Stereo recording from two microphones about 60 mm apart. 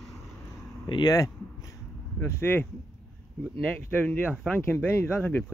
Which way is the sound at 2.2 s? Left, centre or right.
Left.